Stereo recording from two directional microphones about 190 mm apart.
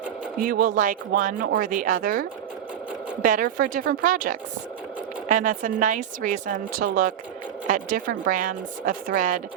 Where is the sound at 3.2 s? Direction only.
45° right (ahead or behind).